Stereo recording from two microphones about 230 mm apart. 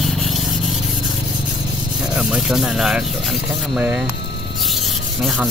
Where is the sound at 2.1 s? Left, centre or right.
Centre.